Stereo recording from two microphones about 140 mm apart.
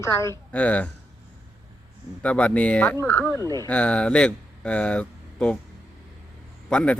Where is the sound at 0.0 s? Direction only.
20° left (ahead or behind).